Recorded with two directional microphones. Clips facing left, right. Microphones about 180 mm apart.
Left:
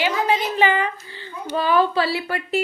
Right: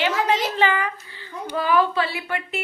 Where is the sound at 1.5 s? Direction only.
30° left (ahead or behind).